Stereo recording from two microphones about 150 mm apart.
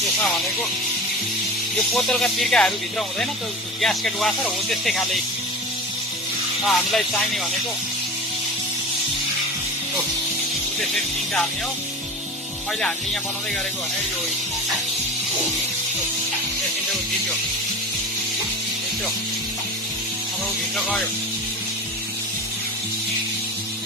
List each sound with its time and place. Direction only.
1.9 s speech: 5° left (ahead or behind)
3.8 s speech: centre (ahead or behind)
6.6 s speech: centre (ahead or behind)